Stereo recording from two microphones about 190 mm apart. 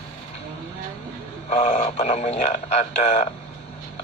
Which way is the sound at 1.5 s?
45° left (ahead or behind).